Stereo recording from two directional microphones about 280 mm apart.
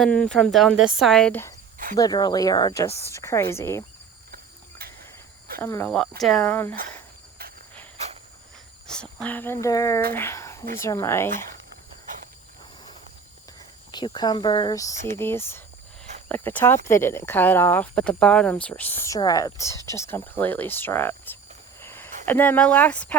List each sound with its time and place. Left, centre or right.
0.0 s speech: centre
4.8 s cricket: right
5.5 s speech: centre
7.9 s cricket: right
8.9 s speech: centre
13.9 s speech: centre
14.9 s speech: right
15.2 s speech: centre
21.8 s a sound: centre
22.3 s speech: centre